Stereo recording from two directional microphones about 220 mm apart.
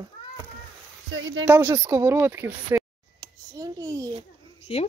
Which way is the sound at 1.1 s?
60° right (ahead or behind).